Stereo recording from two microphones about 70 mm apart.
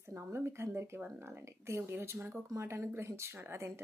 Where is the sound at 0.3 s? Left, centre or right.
Right.